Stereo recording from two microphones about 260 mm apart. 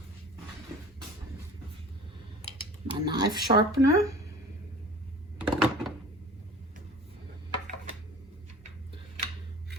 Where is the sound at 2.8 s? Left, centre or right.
Centre.